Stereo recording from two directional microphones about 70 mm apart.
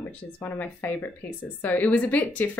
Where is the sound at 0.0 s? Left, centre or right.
Left.